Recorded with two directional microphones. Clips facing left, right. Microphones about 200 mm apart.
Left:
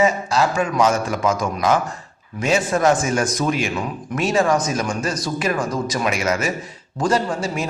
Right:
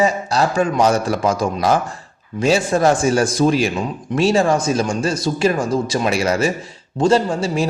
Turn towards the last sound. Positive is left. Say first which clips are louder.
# right 4 dB
turn(degrees=-30)  # may be behind; listen again after turning